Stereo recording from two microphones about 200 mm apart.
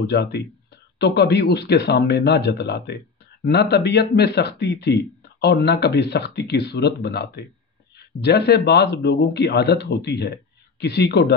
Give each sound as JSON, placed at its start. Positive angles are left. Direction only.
{"t": 0.1, "sound": "speech", "side_deg": 55}